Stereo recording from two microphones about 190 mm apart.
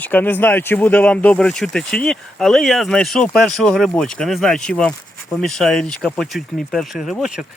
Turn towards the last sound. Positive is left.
turn(degrees=0)  # may be behind; listen again after turning